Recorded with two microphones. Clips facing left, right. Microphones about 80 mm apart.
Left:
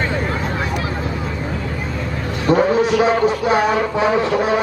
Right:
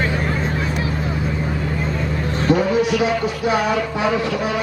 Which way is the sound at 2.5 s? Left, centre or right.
Left.